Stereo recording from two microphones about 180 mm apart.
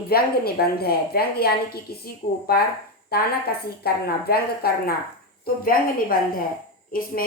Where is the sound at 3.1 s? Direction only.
60° left (ahead or behind).